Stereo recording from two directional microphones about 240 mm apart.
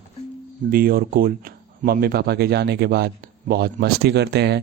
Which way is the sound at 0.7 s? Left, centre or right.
Right.